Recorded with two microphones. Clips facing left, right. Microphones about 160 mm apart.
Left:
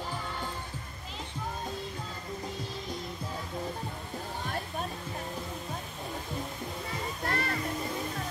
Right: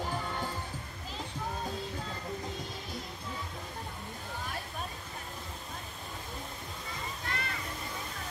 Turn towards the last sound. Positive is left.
turn(degrees=45)  # may be behind; listen again after turning